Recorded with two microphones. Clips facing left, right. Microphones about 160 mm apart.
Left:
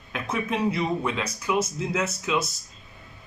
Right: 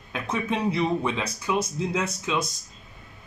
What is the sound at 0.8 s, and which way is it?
Speech, 5° left (ahead or behind).